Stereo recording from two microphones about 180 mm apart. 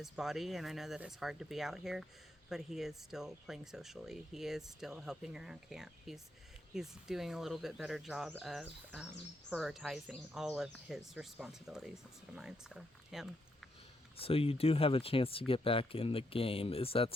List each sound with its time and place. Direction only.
0.0 s speech: centre (ahead or behind)
14.2 s speech: 30° left (ahead or behind)